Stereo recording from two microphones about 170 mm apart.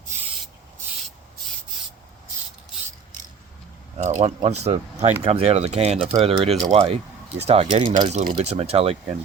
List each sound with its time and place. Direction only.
3.9 s speech: 40° right (ahead or behind)